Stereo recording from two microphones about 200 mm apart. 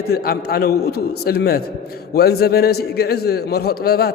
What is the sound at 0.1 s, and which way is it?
A man's voice, 50° left (ahead or behind).